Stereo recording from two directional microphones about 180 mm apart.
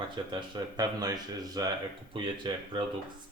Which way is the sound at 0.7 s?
20° right (ahead or behind).